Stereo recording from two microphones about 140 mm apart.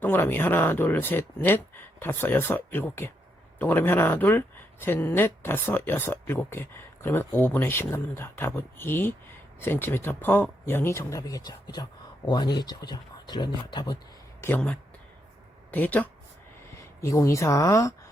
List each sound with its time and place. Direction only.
0.0 s speech: 15° left (ahead or behind); by 13.9 s 35° left (ahead or behind)
14.4 s speech: 10° left (ahead or behind)